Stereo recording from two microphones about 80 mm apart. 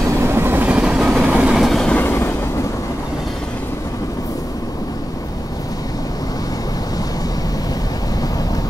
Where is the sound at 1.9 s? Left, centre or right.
Left.